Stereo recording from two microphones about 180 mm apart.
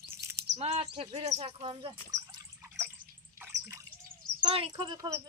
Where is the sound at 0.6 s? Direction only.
35° right (ahead or behind).